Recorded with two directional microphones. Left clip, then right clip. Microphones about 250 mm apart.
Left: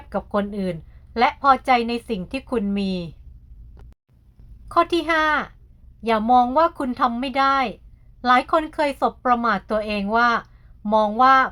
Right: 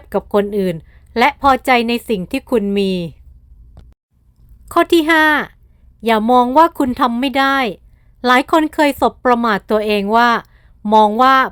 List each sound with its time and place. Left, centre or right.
0.1 s speech: right
4.7 s speech: right